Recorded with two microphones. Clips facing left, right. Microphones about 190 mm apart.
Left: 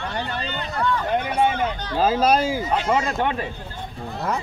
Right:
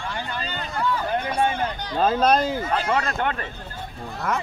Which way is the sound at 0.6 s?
5° right (ahead or behind).